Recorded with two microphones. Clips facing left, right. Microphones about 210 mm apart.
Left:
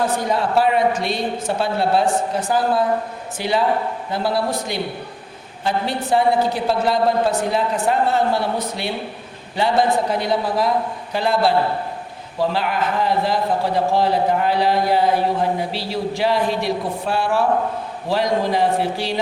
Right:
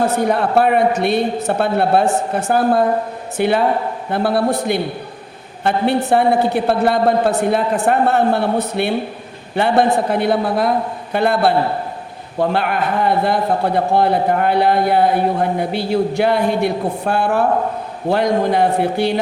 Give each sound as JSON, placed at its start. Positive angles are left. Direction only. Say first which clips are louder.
{"t": 0.3, "sound": "a man's voice", "louder": "right 2 dB", "side_deg": -55}